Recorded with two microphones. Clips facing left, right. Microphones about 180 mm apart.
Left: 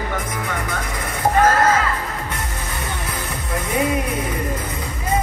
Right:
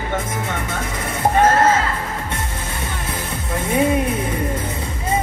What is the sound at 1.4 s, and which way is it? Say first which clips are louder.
Speech: right 2 dB; 25° right (ahead or behind).